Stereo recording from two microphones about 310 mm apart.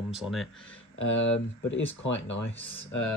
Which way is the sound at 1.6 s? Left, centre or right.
Left.